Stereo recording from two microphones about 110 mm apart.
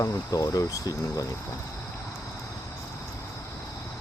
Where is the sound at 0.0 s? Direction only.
35° left (ahead or behind).